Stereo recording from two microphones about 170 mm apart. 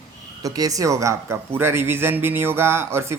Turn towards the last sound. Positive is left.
turn(degrees=-15)  # may be behind; listen again after turning